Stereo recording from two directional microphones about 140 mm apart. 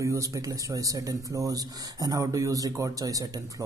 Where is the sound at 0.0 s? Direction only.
20° right (ahead or behind).